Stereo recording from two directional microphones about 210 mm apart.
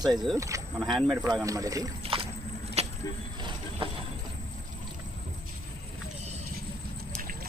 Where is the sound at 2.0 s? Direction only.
25° right (ahead or behind).